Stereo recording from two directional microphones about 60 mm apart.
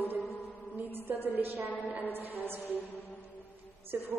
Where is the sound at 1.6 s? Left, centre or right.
Left.